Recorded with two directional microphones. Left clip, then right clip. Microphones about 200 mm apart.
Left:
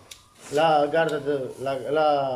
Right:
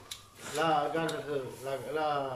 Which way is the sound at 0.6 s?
55° left (ahead or behind).